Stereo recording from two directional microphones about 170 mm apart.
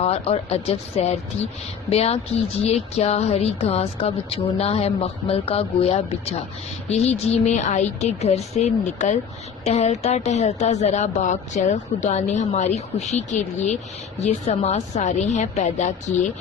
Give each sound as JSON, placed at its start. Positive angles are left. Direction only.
{"t": 0.0, "sound": "a woman's voice", "side_deg": 35}